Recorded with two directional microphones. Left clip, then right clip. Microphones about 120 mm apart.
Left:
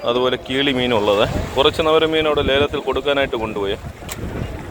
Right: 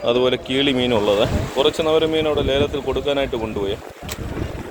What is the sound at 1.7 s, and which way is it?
Speech, 15° right (ahead or behind).